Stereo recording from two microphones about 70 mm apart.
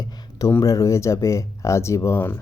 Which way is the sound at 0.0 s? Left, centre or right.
Left.